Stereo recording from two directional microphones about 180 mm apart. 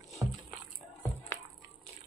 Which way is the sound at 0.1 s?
Centre (ahead or behind).